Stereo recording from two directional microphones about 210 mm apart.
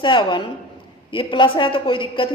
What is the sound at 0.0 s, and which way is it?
A woman's voice, 20° left (ahead or behind).